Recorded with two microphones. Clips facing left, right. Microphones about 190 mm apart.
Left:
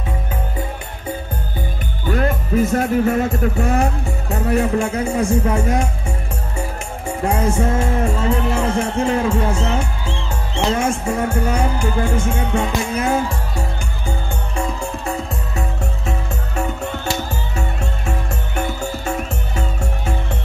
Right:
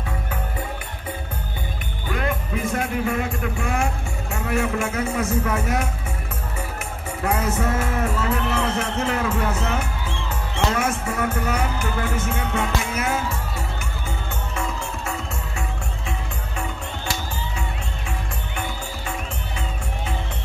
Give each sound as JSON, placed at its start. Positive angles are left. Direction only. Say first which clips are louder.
{"t": 2.0, "sound": "speech", "louder": "left 6 dB", "side_deg": 40}
{"t": 7.2, "sound": "music", "louder": "left 4 dB", "side_deg": 30}
{"t": 8.7, "sound": "speech", "louder": "left 6 dB", "side_deg": 30}
{"t": 14.8, "sound": "music", "louder": "left 5 dB", "side_deg": 35}
{"t": 18.6, "sound": "music", "louder": "left 8 dB", "side_deg": 45}